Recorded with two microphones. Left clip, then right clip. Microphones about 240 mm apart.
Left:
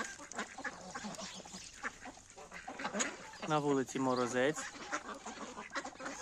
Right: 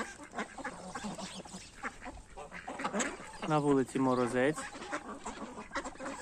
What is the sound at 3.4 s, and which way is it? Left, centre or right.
Speech, centre.